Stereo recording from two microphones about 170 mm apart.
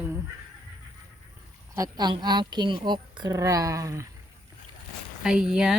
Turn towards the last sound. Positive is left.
turn(degrees=-5)  # may be behind; listen again after turning